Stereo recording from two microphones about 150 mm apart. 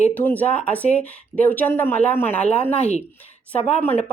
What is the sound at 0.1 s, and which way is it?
Speech, 10° left (ahead or behind).